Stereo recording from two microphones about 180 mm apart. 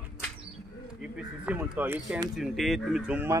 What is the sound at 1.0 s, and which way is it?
Speech, 5° right (ahead or behind).